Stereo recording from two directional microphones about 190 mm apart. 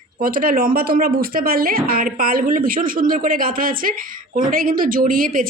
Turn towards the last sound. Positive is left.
turn(degrees=-50)  # may be behind; listen again after turning